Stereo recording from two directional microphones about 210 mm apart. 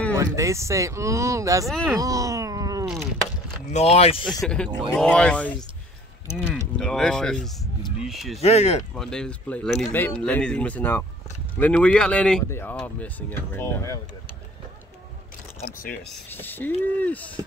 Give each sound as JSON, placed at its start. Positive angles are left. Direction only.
{"t": 0.1, "sound": "speech", "side_deg": -15}
{"t": 1.7, "sound": "speech", "side_deg": 0}
{"t": 2.0, "sound": "groan", "side_deg": -15}
{"t": 3.7, "sound": "speech", "side_deg": 30}
{"t": 4.2, "sound": "speech", "side_deg": 0}
{"t": 8.4, "sound": "speech", "side_deg": 30}
{"t": 8.9, "sound": "speech", "side_deg": 5}
{"t": 15.9, "sound": "speech", "side_deg": 5}